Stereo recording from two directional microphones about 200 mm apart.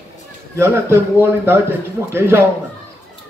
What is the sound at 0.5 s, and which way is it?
A man's voice, 15° right (ahead or behind).